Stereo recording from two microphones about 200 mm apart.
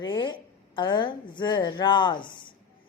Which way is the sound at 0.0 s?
20° left (ahead or behind).